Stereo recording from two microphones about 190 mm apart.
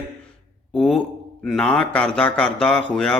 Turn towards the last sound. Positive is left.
turn(degrees=5)  # may be behind; listen again after turning